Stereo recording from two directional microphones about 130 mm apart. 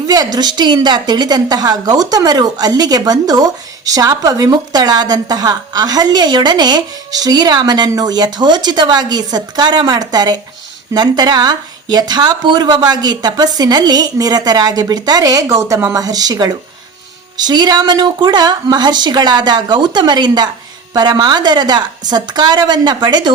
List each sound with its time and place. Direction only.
0.1 s a woman's voice: 30° right (ahead or behind)